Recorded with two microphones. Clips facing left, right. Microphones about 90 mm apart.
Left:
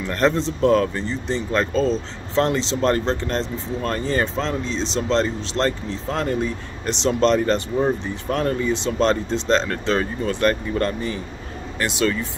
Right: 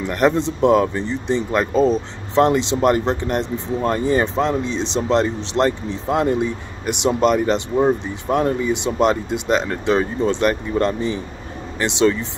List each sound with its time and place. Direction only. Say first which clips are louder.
0.0 s speech: right 2 dB; 15° right (ahead or behind)